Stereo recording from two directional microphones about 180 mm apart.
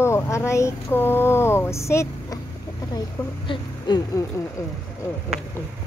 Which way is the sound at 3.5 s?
25° left (ahead or behind).